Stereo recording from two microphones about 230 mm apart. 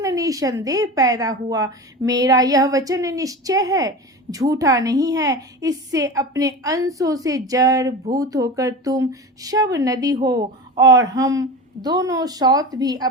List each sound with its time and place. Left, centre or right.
0.0 s a woman's voice: centre